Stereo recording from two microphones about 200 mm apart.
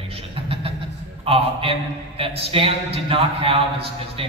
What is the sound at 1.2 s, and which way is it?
A man's voice, 30° right (ahead or behind).